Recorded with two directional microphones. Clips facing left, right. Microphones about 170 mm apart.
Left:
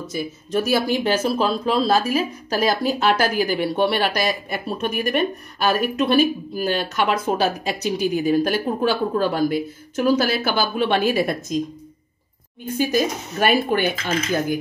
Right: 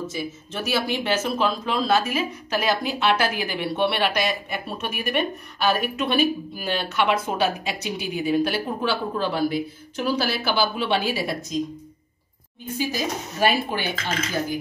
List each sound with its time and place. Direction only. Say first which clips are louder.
0.0 s speech: left 2 dB; 40° left (ahead or behind)
12.7 s speech: left 6 dB; 50° left (ahead or behind)